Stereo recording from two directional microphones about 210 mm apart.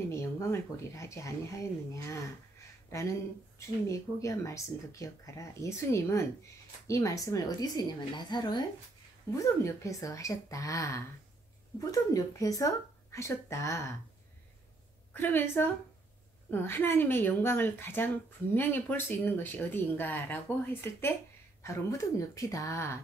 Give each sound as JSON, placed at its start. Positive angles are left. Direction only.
{"t": 0.1, "sound": "a woman's voice", "side_deg": 15}
{"t": 15.1, "sound": "a woman's voice", "side_deg": 10}